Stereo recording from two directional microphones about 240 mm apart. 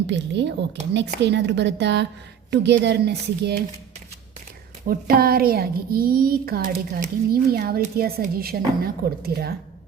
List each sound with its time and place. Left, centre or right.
0.1 s a woman's voice: right
4.9 s a child's voice: right